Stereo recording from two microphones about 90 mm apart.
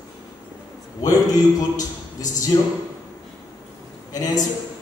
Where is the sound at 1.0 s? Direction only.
40° left (ahead or behind).